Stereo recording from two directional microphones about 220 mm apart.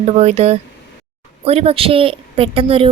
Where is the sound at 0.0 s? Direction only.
30° right (ahead or behind).